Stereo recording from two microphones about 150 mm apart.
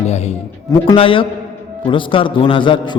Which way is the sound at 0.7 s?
35° left (ahead or behind).